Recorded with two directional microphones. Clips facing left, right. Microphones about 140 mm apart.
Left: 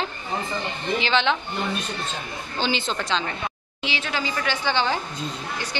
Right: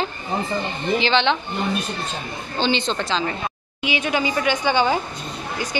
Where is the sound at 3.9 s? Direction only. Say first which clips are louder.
Right 6 dB; 15° right (ahead or behind).